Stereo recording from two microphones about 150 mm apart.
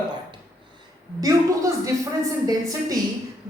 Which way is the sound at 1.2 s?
25° right (ahead or behind).